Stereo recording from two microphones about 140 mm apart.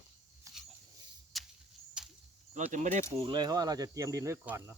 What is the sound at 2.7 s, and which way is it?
Speech, 60° right (ahead or behind).